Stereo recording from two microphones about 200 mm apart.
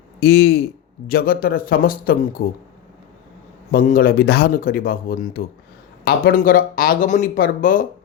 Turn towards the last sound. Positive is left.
turn(degrees=40)  # may be behind; listen again after turning